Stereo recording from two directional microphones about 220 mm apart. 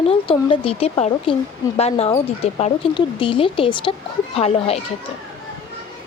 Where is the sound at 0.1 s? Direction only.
25° left (ahead or behind).